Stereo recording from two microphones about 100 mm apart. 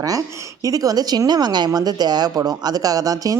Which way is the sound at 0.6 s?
35° right (ahead or behind).